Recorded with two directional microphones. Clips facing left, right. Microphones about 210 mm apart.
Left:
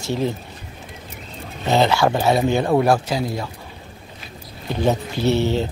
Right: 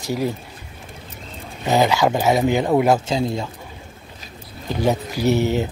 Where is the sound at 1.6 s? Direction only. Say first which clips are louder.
Even; 15° right (ahead or behind).